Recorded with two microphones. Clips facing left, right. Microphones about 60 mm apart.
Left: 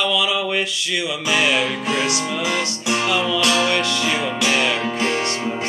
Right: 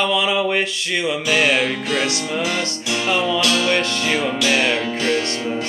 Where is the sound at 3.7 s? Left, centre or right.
Right.